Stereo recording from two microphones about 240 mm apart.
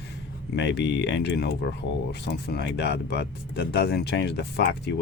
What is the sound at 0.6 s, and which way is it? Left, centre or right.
Speech, left.